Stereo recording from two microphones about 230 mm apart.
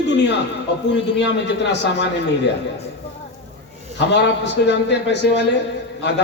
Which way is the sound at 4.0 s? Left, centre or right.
Left.